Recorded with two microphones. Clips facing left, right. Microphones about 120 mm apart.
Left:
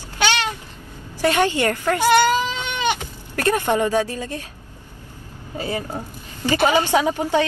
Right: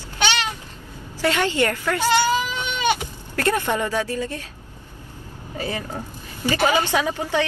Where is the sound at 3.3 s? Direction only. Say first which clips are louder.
Left 2 dB; 40° left (ahead or behind).